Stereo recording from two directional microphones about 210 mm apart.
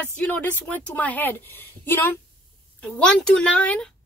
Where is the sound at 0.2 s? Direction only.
5° left (ahead or behind).